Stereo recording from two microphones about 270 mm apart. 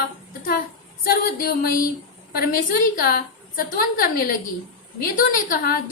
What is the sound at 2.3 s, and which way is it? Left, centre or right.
A woman's voice, left.